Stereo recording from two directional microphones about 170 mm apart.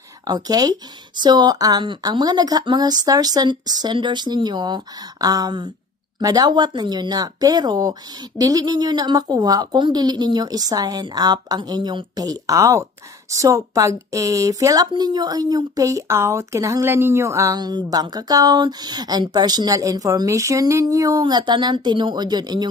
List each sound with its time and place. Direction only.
0.3 s speech: 25° right (ahead or behind)